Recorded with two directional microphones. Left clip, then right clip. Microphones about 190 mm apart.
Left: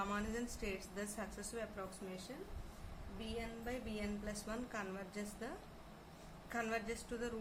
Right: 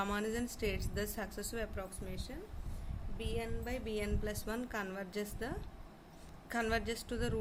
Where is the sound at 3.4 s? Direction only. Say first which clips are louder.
Right 3 dB; 50° right (ahead or behind).